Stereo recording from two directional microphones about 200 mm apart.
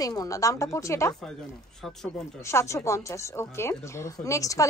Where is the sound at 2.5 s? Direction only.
15° left (ahead or behind).